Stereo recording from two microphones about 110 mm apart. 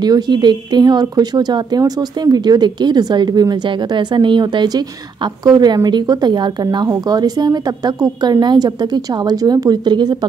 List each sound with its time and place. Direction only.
0.0 s speech: 40° right (ahead or behind)